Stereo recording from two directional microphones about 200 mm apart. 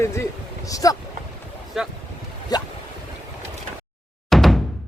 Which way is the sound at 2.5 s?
20° left (ahead or behind).